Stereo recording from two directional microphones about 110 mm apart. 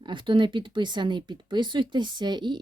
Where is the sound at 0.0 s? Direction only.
45° right (ahead or behind).